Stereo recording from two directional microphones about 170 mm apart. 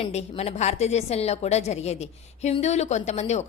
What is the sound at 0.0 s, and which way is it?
A woman's voice, 40° left (ahead or behind).